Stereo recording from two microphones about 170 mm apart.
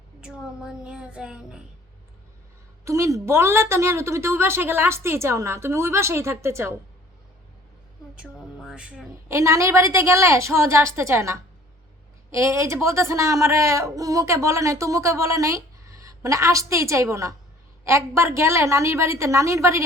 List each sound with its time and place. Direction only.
0.2 s a woman's voice: 5° right (ahead or behind)
2.8 s speech: 20° right (ahead or behind)
8.1 s a woman's voice: 5° right (ahead or behind)
9.3 s speech: 20° right (ahead or behind)